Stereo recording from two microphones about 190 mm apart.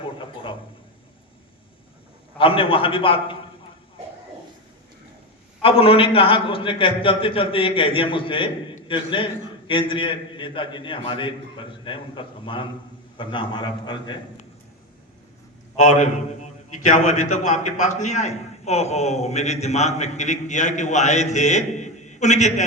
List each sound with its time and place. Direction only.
0.0 s speech: 25° left (ahead or behind)
2.4 s a man's voice: 30° left (ahead or behind)
5.6 s a man's voice: 30° left (ahead or behind)
15.7 s a man's voice: 40° left (ahead or behind)